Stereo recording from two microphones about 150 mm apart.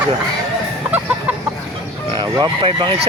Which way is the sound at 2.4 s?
35° right (ahead or behind).